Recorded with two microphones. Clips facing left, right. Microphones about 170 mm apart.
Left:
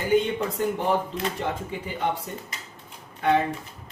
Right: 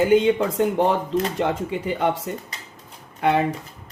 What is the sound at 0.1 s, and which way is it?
Speech, 90° right.